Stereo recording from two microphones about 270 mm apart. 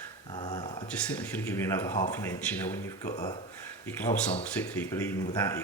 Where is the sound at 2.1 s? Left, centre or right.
Centre.